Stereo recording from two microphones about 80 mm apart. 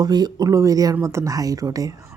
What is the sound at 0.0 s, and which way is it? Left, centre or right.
A woman's voice, right.